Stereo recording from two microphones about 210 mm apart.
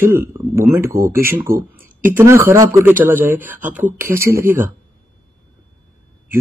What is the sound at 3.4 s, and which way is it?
Speech, 40° right (ahead or behind).